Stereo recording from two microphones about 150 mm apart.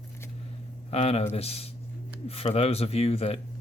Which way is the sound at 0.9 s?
45° left (ahead or behind).